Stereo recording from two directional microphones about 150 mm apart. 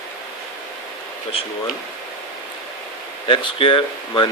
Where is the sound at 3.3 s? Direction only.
35° left (ahead or behind).